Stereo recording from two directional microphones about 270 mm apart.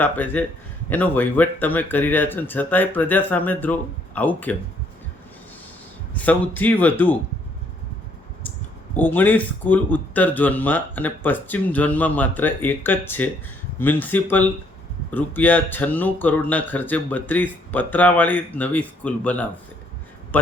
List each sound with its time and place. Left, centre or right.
0.0 s a man's voice: centre
6.1 s a man's voice: centre
9.0 s a man's voice: centre